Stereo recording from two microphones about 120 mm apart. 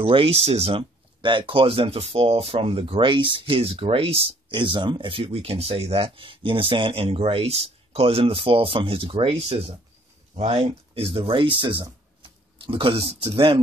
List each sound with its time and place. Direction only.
0.0 s speech: 50° right (ahead or behind)
4.5 s speech: 40° right (ahead or behind)